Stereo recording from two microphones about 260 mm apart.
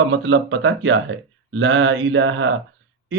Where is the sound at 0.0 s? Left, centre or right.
Right.